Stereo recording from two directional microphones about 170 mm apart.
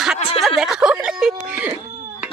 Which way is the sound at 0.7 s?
5° right (ahead or behind).